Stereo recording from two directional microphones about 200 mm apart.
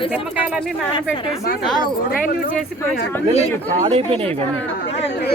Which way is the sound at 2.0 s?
45° left (ahead or behind).